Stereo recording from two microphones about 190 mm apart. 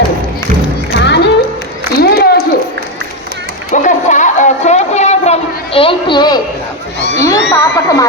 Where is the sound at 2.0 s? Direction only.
55° left (ahead or behind).